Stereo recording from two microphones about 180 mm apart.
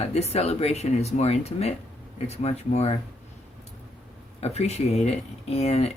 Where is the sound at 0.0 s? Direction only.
35° left (ahead or behind).